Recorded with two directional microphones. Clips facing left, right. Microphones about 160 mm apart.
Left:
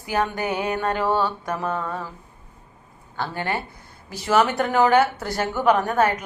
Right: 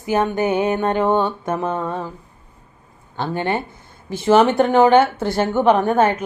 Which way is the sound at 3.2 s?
20° right (ahead or behind).